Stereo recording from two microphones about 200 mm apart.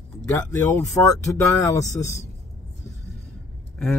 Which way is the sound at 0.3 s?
15° left (ahead or behind).